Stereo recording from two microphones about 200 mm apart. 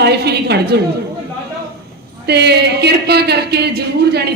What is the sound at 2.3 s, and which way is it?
A man's voice, 55° right (ahead or behind).